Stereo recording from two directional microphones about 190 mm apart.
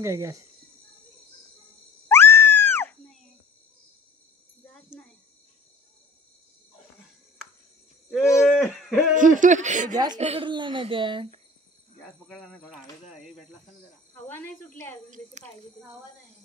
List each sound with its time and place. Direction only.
0.0 s speech: 15° right (ahead or behind)
2.0 s a sound: 10° left (ahead or behind)
4.9 s cricket: 5° left (ahead or behind)
8.2 s speech: 15° left (ahead or behind)
8.5 s a sound: centre (ahead or behind)
9.1 s speech: 45° right (ahead or behind)
12.3 s speech: 5° left (ahead or behind)
14.1 s speech: 10° left (ahead or behind)